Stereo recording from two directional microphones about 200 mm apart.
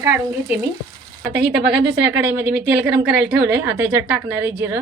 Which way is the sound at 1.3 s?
55° right (ahead or behind).